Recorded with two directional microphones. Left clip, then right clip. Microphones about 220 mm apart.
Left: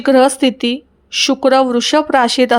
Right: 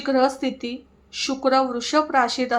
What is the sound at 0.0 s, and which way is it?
A woman's voice, 35° left (ahead or behind).